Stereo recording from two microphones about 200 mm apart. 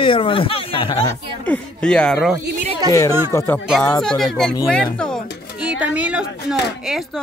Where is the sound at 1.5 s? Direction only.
5° left (ahead or behind).